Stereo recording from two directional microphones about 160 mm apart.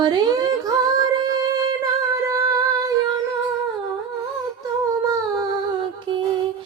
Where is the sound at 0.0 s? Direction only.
25° right (ahead or behind).